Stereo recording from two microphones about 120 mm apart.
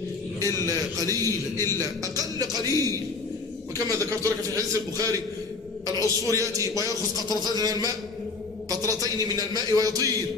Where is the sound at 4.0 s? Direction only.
30° right (ahead or behind).